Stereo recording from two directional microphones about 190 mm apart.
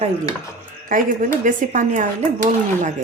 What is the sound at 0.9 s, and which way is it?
Speech, 45° right (ahead or behind).